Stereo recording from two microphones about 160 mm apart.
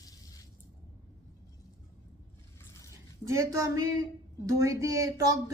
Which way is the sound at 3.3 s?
20° right (ahead or behind).